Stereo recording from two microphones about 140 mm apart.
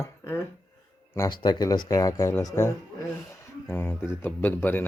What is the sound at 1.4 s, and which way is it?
Speech, 30° left (ahead or behind).